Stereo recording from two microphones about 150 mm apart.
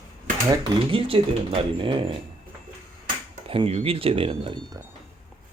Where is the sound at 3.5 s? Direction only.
40° right (ahead or behind).